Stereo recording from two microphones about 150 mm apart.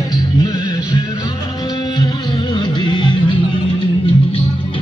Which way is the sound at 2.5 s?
30° left (ahead or behind).